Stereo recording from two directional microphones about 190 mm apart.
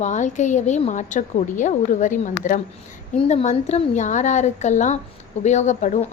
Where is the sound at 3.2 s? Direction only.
35° left (ahead or behind).